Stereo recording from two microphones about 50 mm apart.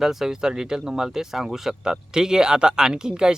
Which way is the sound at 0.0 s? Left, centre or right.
Centre.